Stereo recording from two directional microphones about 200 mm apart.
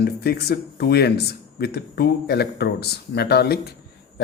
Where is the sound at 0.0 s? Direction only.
55° left (ahead or behind).